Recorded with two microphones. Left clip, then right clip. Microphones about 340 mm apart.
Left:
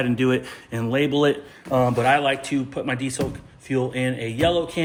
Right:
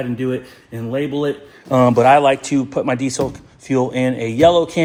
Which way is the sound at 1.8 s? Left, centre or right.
Right.